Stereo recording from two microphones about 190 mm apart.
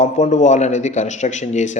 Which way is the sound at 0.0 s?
40° left (ahead or behind).